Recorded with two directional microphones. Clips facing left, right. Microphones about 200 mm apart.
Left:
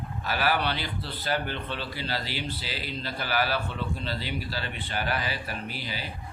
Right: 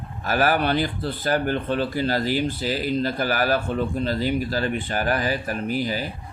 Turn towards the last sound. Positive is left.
turn(degrees=-45)  # may be behind; listen again after turning